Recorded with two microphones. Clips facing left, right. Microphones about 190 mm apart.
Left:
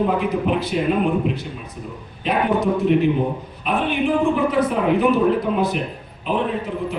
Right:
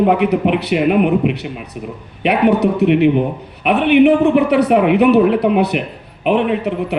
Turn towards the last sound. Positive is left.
turn(degrees=-70)  # may be behind; listen again after turning